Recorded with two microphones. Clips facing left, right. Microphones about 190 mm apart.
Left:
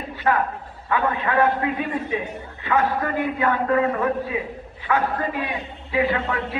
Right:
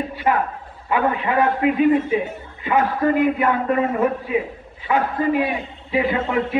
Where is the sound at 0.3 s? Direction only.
15° right (ahead or behind).